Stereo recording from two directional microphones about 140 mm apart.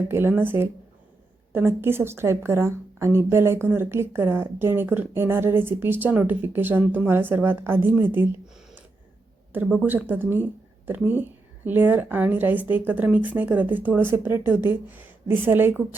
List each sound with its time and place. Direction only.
0.1 s a woman's voice: 15° right (ahead or behind)
9.5 s a woman's voice: 10° right (ahead or behind)